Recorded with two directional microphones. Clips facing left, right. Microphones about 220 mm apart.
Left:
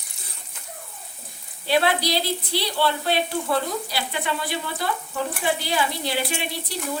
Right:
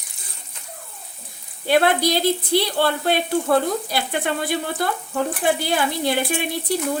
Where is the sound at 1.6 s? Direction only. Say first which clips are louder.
Right 4 dB; 50° right (ahead or behind).